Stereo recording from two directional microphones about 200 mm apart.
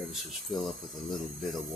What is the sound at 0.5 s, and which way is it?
Speech, centre (ahead or behind).